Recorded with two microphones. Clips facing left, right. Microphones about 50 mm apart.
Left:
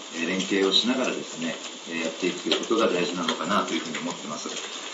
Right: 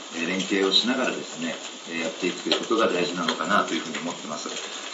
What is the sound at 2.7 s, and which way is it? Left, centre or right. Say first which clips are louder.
Speech: right 1 dB; centre.